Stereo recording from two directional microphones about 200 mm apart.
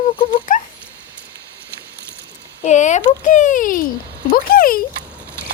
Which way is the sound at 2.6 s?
35° left (ahead or behind).